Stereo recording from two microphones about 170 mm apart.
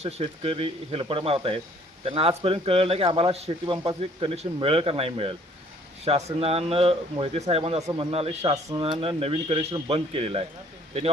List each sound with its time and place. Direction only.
0.0 s a man's voice: 35° right (ahead or behind)